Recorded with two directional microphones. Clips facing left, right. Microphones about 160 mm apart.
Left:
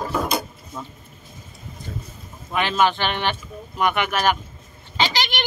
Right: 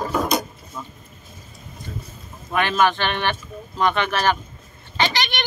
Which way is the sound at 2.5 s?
15° left (ahead or behind).